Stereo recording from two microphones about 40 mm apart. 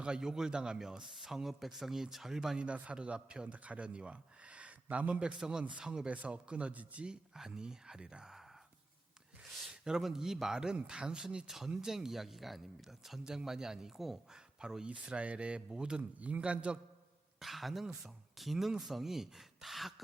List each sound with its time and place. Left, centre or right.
0.0 s speech: centre
2.9 s speech: right
5.4 s speech: centre
6.1 s speech: right
7.3 s speech: centre
9.4 s a sound: centre
9.6 s speech: centre
11.4 s speech: centre
14.8 s speech: right
16.1 s a man's voice: right
17.4 s speech: centre